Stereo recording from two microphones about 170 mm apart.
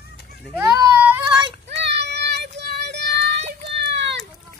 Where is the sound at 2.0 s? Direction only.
80° right.